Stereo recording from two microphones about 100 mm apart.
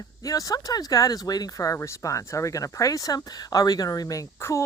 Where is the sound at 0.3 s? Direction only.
35° left (ahead or behind).